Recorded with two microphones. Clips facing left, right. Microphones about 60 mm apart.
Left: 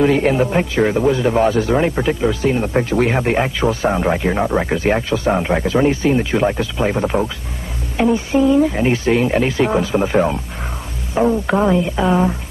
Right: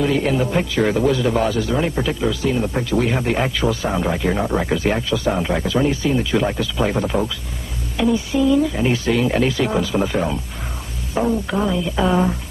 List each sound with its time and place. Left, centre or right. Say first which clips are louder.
0.0 s speech: left 4 dB; left
0.8 s a man's voice: left 1 dB; centre; by 3.2 s left
3.2 s a man's voice: left 3 dB; left
5.7 s speech: left 4 dB; left
6.3 s a man's voice: left 2 dB; left
8.0 s speech: left 3 dB; left
11.2 s a man's voice: left 4 dB; centre
11.5 s speech: left 5 dB; left
12.0 s speech: right 2 dB; centre